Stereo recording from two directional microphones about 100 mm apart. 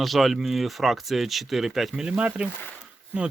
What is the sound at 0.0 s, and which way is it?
Speech, centre (ahead or behind).